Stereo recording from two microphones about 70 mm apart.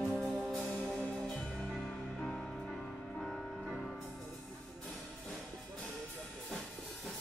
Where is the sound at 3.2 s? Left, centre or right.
Centre.